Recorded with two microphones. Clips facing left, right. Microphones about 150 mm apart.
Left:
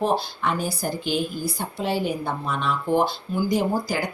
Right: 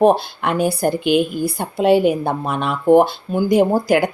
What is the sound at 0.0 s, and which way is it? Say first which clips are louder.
Speech: right 9 dB; 65° right (ahead or behind).